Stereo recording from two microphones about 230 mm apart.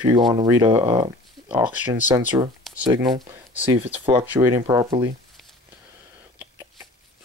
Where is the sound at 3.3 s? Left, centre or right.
Centre.